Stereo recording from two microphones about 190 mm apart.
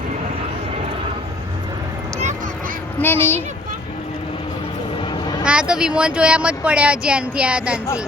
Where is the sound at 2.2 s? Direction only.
40° right (ahead or behind).